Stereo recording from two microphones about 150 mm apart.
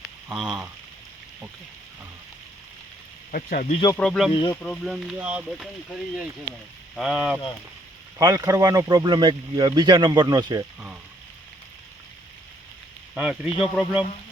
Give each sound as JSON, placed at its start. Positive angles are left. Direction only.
{"t": 0.3, "sound": "speech", "side_deg": -5}
{"t": 3.3, "sound": "speech", "side_deg": 70}
{"t": 3.9, "sound": "speech", "side_deg": 5}
{"t": 4.3, "sound": "speech", "side_deg": 35}
{"t": 4.6, "sound": "speech", "side_deg": 5}
{"t": 8.2, "sound": "speech", "side_deg": -25}
{"t": 13.1, "sound": "speech", "side_deg": -10}